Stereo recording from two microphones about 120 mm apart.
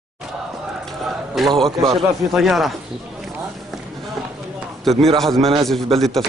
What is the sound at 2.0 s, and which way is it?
Speech, centre (ahead or behind).